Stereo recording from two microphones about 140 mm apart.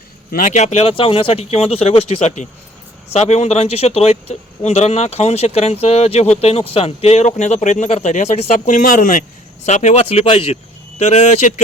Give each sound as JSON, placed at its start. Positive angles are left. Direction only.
{"t": 0.3, "sound": "speech", "side_deg": 70}
{"t": 9.6, "sound": "speech", "side_deg": 60}